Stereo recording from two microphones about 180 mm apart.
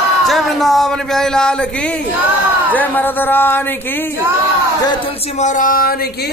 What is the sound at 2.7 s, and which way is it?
Speech, 10° left (ahead or behind).